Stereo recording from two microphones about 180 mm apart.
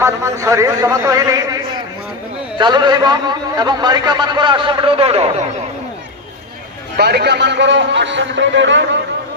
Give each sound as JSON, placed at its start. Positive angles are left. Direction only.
{"t": 0.0, "sound": "a man's voice", "side_deg": -15}
{"t": 2.6, "sound": "a man's voice", "side_deg": -25}
{"t": 6.9, "sound": "a man's voice", "side_deg": -65}